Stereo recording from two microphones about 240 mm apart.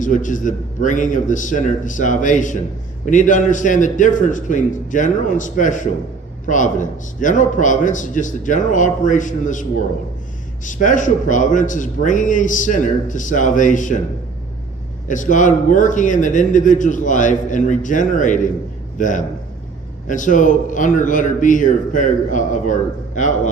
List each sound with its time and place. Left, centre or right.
0.0 s a man's voice: left
15.0 s a man's voice: left